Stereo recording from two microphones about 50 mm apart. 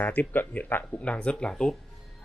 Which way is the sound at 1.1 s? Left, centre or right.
Left.